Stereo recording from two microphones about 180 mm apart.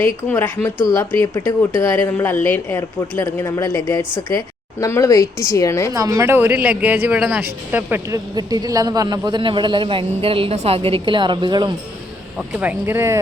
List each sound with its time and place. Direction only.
0.0 s a woman's voice: 10° left (ahead or behind)
5.9 s speech: 20° right (ahead or behind)
12.5 s speech: 10° right (ahead or behind)